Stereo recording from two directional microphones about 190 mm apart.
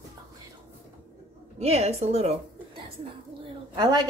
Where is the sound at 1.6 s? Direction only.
35° right (ahead or behind).